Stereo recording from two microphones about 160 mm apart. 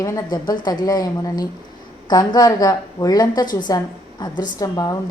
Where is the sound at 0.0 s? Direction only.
20° left (ahead or behind).